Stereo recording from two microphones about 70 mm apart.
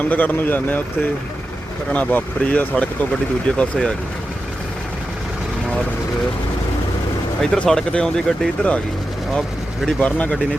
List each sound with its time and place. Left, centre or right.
0.1 s speech: left
1.9 s speech: centre
7.4 s speech: centre
10.0 s speech: left